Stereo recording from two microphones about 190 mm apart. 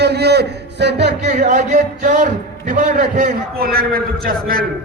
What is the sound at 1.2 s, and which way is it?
A man's voice, 40° right (ahead or behind).